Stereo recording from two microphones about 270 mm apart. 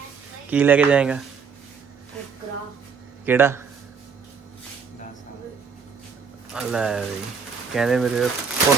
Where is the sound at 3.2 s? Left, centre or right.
Centre.